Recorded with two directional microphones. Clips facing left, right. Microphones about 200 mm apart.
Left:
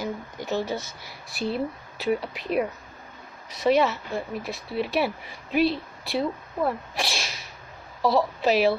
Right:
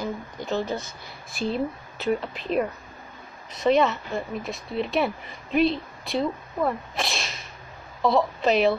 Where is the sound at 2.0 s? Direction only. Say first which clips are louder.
Even; 5° left (ahead or behind).